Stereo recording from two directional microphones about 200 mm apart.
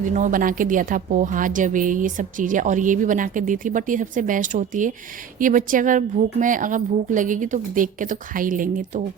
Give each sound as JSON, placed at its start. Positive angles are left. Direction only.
{"t": 0.0, "sound": "a woman's voice", "side_deg": -40}